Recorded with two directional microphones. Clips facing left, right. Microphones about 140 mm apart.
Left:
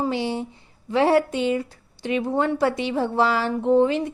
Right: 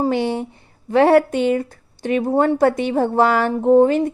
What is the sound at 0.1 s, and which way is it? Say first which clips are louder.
A woman's voice: right 5 dB; 55° right (ahead or behind).